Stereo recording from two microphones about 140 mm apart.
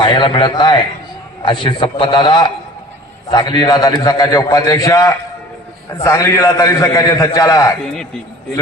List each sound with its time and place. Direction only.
0.0 s a man's voice: 35° left (ahead or behind)